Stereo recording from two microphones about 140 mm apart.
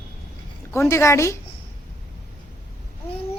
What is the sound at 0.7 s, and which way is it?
Speech, 20° left (ahead or behind).